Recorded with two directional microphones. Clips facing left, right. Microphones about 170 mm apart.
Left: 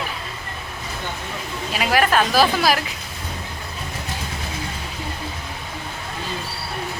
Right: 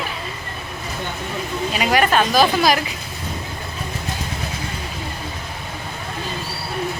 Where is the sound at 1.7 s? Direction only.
Centre (ahead or behind).